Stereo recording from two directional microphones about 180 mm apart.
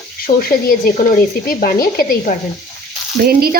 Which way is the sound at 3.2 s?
55° right (ahead or behind).